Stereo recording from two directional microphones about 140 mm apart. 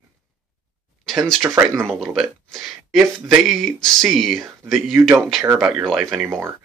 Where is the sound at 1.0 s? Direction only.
Centre (ahead or behind).